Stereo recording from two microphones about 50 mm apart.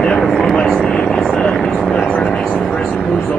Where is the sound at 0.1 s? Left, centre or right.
Centre.